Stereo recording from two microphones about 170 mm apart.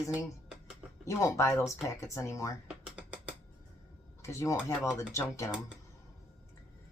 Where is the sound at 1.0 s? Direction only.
20° left (ahead or behind).